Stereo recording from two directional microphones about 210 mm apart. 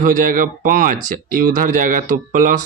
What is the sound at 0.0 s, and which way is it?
Speech, 40° right (ahead or behind).